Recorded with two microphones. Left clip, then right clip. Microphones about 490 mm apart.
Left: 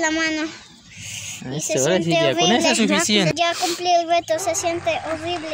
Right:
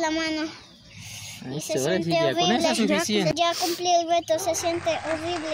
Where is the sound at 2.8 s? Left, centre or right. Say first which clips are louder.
Left 5 dB; right.